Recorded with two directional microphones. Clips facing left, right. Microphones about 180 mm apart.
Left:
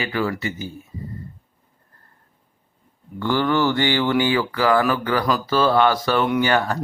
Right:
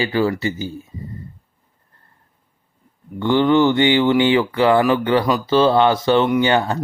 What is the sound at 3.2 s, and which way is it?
Speech, 20° right (ahead or behind).